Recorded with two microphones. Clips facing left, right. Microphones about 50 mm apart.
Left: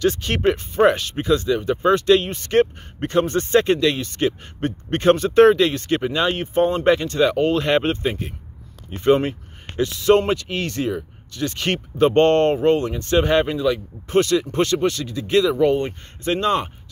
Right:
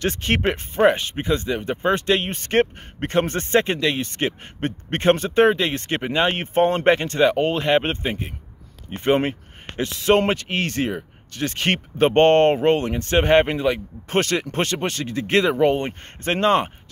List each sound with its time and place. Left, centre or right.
0.0 s speech: right
0.9 s speech: right
3.6 s speech: right
4.0 s speech: right
5.3 s speech: centre
5.7 s speech: right
7.2 s speech: right
15.5 s speech: right